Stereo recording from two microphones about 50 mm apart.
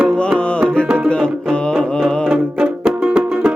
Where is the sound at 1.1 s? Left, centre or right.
Centre.